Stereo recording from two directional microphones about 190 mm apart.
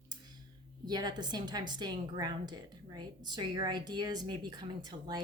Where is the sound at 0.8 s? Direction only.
20° right (ahead or behind).